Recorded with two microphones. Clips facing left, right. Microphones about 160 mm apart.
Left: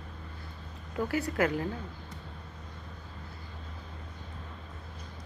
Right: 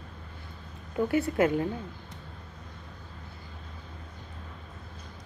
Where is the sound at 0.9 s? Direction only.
25° right (ahead or behind).